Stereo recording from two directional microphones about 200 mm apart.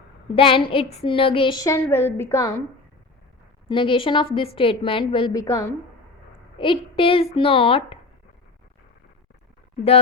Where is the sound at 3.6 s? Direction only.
25° left (ahead or behind).